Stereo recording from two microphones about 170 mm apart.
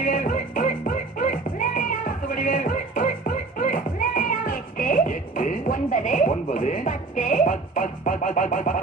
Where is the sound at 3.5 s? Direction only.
55° left (ahead or behind).